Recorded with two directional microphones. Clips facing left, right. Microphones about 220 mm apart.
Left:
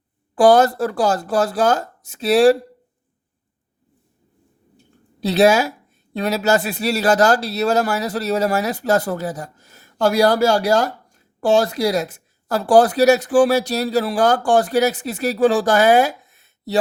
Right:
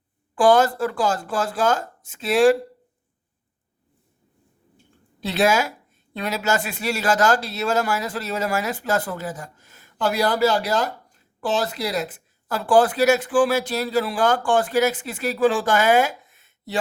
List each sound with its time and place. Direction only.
0.3 s speech: 40° left (ahead or behind)
5.2 s speech: 35° left (ahead or behind)